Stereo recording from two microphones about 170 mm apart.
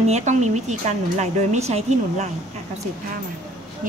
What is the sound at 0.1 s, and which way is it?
Speech, 45° right (ahead or behind).